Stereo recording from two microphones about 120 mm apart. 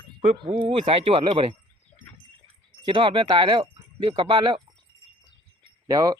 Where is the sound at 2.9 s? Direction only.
45° right (ahead or behind).